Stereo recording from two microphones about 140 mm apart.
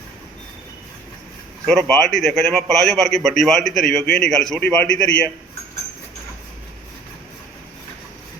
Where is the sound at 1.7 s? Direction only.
5° left (ahead or behind).